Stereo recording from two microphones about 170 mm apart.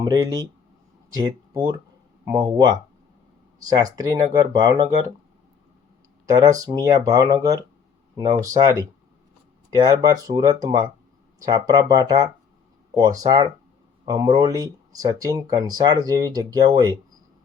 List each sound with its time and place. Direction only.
0.0 s speech: 20° right (ahead or behind)
6.2 s speech: 20° right (ahead or behind)